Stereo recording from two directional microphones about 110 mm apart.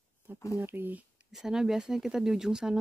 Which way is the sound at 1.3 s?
5° right (ahead or behind).